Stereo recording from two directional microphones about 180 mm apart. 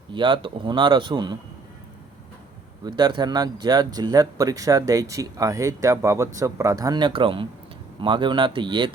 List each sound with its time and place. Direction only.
0.1 s speech: 25° right (ahead or behind)
2.8 s speech: 25° right (ahead or behind)